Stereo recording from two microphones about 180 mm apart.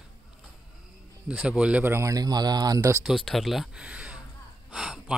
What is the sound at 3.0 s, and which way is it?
Speech, centre (ahead or behind).